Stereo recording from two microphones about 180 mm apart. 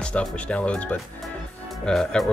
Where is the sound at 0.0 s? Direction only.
5° left (ahead or behind).